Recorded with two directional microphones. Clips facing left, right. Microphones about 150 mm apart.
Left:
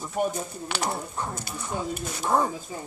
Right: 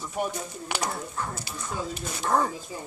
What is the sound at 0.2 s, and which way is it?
Speech, 45° left (ahead or behind).